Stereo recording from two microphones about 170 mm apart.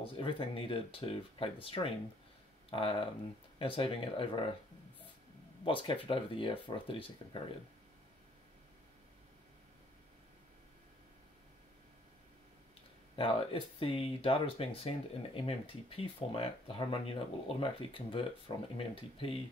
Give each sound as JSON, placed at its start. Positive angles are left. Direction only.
{"t": 0.0, "sound": "speech", "side_deg": 30}
{"t": 5.6, "sound": "speech", "side_deg": 30}
{"t": 13.1, "sound": "speech", "side_deg": 30}